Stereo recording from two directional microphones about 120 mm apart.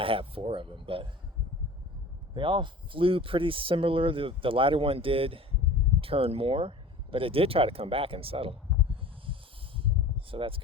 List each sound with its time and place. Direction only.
0.0 s speech: 50° right (ahead or behind)
2.3 s speech: 45° right (ahead or behind)
9.2 s a sound: 45° right (ahead or behind)